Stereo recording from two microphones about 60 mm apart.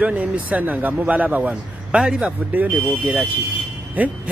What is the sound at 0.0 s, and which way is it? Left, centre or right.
Speech, right.